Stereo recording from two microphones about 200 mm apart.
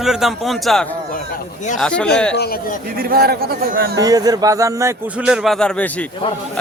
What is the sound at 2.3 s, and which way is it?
Speech, 50° left (ahead or behind).